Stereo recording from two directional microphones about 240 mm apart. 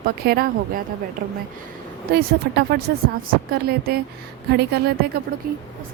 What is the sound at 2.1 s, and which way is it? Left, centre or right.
A woman's voice, right.